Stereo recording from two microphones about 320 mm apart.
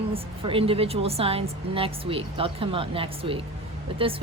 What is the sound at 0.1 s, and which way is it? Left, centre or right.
A woman's voice, centre.